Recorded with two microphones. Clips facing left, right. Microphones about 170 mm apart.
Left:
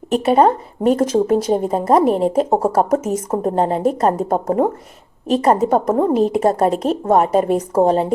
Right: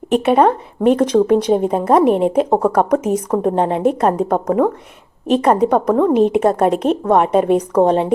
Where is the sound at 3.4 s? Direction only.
40° left (ahead or behind).